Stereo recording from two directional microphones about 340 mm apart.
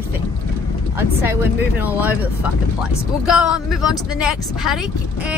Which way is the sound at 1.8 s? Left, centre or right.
Centre.